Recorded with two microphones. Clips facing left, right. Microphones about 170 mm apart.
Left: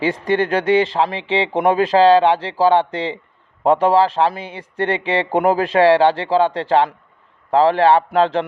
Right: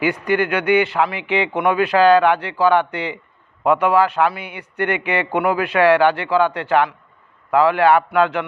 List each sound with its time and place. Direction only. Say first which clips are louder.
0.0 s a man's voice: left 1 dB; 30° left (ahead or behind)